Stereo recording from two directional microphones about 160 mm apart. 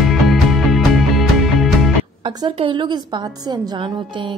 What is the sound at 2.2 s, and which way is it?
A woman's voice, 35° right (ahead or behind).